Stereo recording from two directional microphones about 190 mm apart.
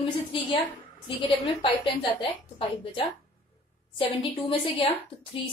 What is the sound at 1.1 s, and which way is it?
A woman's voice, 25° left (ahead or behind).